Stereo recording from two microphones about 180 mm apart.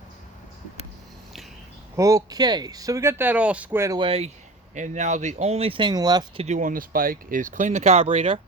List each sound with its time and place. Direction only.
2.0 s speech: 20° right (ahead or behind)
4.7 s speech: 40° right (ahead or behind); by 6.4 s 25° right (ahead or behind)
6.4 s speech: 45° right (ahead or behind)